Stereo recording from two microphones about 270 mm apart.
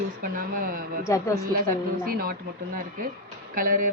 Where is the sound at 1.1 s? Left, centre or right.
Centre.